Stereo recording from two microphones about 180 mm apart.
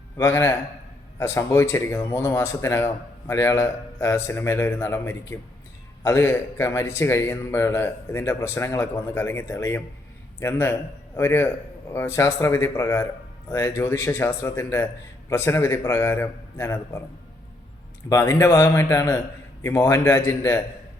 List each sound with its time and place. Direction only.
0.2 s speech: 15° left (ahead or behind)
18.1 s speech: 15° left (ahead or behind)